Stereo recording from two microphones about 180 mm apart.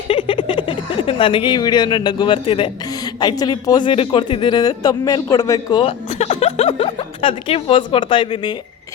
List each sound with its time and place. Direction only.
0.1 s speech: 30° left (ahead or behind)